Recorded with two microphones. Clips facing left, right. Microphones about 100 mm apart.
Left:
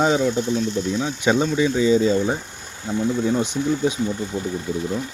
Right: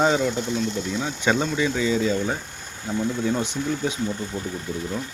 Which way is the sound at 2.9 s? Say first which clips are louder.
Left 2 dB; 5° right (ahead or behind).